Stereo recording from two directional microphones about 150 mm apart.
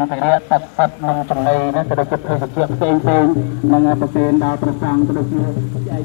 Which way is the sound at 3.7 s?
40° right (ahead or behind).